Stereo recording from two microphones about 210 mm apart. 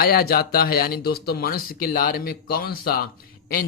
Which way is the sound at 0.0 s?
45° left (ahead or behind).